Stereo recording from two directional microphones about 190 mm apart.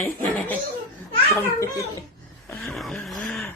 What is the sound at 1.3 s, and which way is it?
Speech, 15° left (ahead or behind).